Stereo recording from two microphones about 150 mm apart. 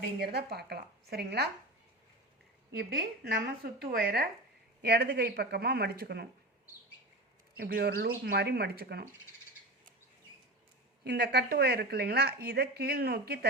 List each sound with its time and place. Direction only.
0.2 s speech: 90° right
3.3 s speech: 90° right
7.5 s speech: 90° right
11.0 s speech: 90° right